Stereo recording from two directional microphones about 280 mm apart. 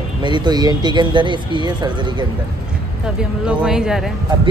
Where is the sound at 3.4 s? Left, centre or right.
Centre.